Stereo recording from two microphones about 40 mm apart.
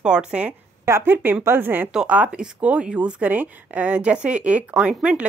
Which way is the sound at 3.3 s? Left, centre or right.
Right.